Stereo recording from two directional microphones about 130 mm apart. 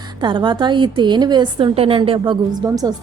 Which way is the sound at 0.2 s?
35° right (ahead or behind).